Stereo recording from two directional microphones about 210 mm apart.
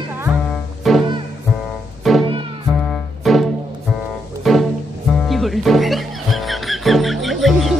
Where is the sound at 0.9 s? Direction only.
Centre (ahead or behind).